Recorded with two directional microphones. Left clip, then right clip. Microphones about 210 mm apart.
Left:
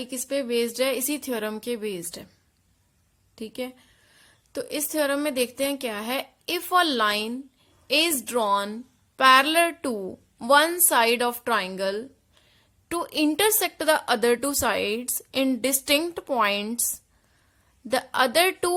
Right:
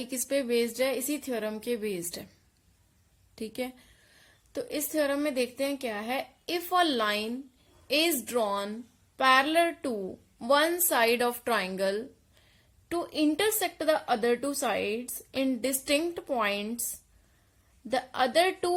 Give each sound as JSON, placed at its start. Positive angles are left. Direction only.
{"t": 0.0, "sound": "speech", "side_deg": 10}
{"t": 3.3, "sound": "a woman's voice", "side_deg": 10}
{"t": 12.9, "sound": "a woman's voice", "side_deg": 25}
{"t": 17.8, "sound": "a woman's voice", "side_deg": 25}